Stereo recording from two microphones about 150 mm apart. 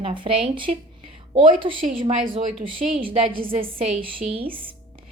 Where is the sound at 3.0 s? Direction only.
35° right (ahead or behind).